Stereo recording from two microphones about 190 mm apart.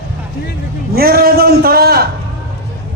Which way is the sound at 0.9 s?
55° right (ahead or behind).